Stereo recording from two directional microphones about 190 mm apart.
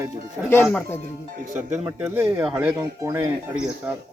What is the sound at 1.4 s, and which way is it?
Speech, 40° right (ahead or behind).